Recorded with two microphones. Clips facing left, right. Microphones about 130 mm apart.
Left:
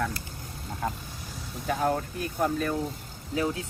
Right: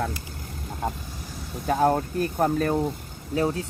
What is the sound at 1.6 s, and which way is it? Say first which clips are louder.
Speech: right 5 dB; 40° right (ahead or behind).